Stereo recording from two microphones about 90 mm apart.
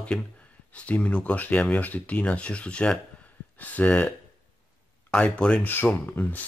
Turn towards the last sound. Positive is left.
turn(degrees=15)  # may be behind; listen again after turning